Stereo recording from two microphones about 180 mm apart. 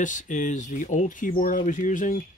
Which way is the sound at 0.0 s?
45° left (ahead or behind).